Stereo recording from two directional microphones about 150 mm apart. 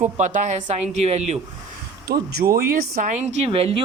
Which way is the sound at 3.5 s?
40° right (ahead or behind).